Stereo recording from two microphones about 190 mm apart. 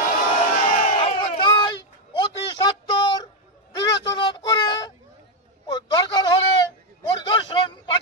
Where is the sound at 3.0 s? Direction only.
25° left (ahead or behind).